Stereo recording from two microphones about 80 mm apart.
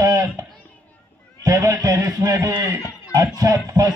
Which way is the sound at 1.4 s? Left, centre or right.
Right.